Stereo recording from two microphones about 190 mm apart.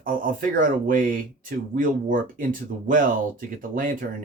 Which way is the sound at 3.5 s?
45° right (ahead or behind).